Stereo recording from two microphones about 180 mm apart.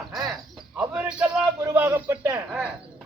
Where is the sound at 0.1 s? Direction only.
Centre (ahead or behind).